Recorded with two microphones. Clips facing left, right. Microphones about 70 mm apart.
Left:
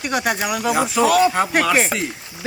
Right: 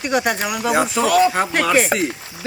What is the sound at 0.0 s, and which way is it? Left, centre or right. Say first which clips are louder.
Speech: right 2 dB; centre.